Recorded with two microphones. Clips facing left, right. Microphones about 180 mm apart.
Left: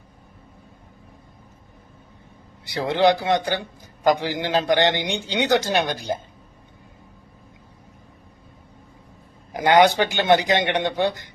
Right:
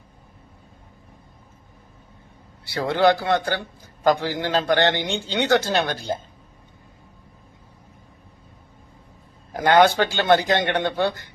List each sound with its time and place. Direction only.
2.6 s a man's voice: 15° left (ahead or behind)
9.5 s a man's voice: 15° left (ahead or behind)